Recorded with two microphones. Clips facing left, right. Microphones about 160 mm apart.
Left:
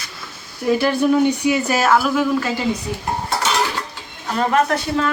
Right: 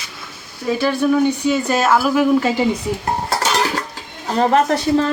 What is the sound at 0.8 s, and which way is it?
Speech, 15° left (ahead or behind).